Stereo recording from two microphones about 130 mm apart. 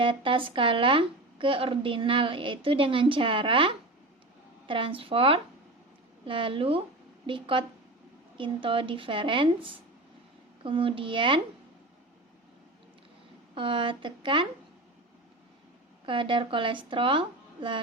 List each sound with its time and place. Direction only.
0.0 s speech: 40° right (ahead or behind)
13.5 s speech: 40° right (ahead or behind)
16.0 s speech: 40° right (ahead or behind)